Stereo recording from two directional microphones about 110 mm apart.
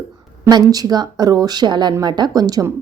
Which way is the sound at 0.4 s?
35° right (ahead or behind).